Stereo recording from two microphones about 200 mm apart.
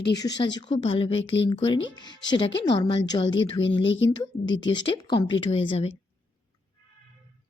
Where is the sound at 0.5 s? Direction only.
25° left (ahead or behind).